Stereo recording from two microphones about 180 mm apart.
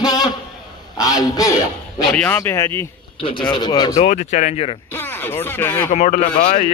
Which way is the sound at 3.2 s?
25° left (ahead or behind).